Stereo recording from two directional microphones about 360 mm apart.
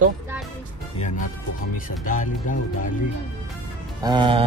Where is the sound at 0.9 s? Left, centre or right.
Centre.